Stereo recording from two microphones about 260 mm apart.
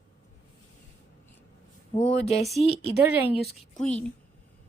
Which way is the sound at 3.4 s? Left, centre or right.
Centre.